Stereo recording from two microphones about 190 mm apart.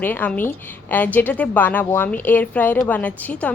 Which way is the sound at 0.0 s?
10° left (ahead or behind).